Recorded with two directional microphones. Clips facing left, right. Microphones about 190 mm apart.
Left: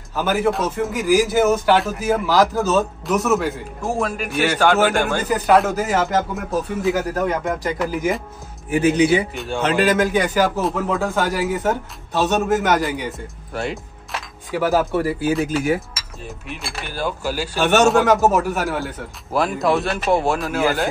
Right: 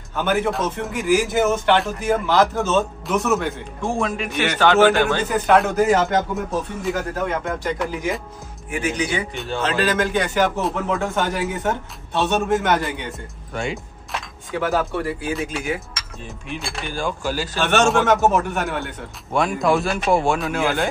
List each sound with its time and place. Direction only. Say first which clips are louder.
0.1 s a man's voice: left 2 dB; centre (ahead or behind)
8.7 s speech: left 8 dB; 30° left (ahead or behind)
9.5 s a man's voice: left 3 dB; 15° left (ahead or behind)